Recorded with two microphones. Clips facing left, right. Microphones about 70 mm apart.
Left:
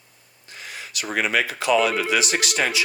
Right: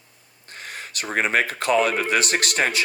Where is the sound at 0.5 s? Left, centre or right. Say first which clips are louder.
Right 1 dB; right.